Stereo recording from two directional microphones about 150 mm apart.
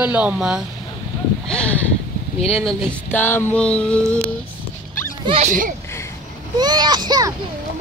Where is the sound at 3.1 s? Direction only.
15° left (ahead or behind).